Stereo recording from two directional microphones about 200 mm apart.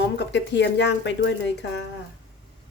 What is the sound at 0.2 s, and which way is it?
Speech, 60° left (ahead or behind).